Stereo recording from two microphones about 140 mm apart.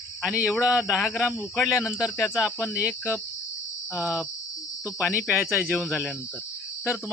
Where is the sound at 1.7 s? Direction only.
15° left (ahead or behind).